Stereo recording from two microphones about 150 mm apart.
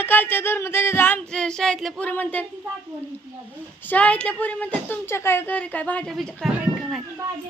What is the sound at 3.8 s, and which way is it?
Speech, 10° left (ahead or behind).